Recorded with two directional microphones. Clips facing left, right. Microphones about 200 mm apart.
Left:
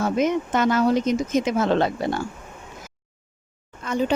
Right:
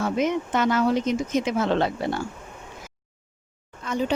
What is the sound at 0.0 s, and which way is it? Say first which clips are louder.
Speech: left 2 dB; 45° left (ahead or behind).